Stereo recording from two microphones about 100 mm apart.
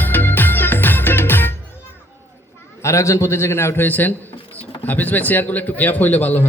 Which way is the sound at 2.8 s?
30° left (ahead or behind).